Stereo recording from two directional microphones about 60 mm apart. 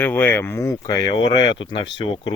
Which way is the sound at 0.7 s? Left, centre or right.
Left.